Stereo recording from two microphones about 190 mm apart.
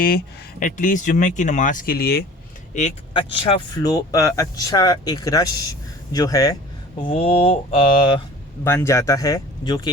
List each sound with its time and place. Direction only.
0.6 s speech: 45° left (ahead or behind)
2.7 s speech: 30° left (ahead or behind)
7.1 s speech: 30° left (ahead or behind)
8.6 s speech: 15° left (ahead or behind)